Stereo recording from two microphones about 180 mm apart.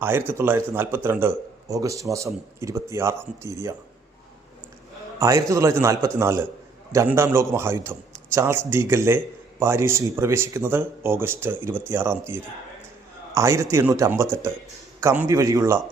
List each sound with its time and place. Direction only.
0.0 s a man's voice: 10° right (ahead or behind)
5.2 s a man's voice: 15° right (ahead or behind)